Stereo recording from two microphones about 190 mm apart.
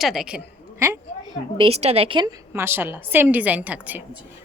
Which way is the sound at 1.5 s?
30° right (ahead or behind).